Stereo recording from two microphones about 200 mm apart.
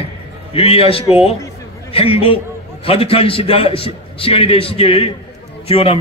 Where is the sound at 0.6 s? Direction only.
30° left (ahead or behind).